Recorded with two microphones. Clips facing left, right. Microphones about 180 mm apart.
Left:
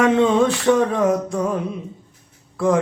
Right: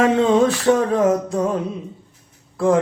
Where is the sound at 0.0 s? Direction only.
35° right (ahead or behind).